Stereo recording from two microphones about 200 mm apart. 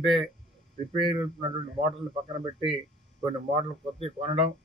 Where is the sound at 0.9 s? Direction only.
25° right (ahead or behind).